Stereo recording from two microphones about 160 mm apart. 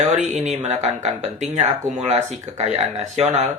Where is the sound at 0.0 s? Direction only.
45° right (ahead or behind).